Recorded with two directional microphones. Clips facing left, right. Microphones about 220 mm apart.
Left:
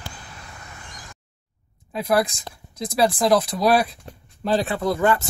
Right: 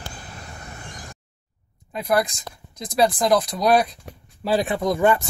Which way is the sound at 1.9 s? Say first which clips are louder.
Left 1 dB; centre (ahead or behind).